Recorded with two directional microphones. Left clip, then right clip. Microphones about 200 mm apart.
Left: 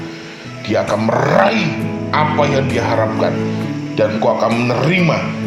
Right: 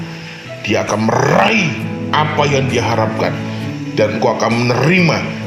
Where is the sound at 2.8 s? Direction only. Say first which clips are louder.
Even; 45° right (ahead or behind).